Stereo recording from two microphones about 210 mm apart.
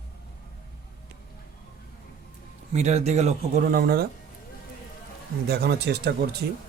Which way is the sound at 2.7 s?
30° right (ahead or behind).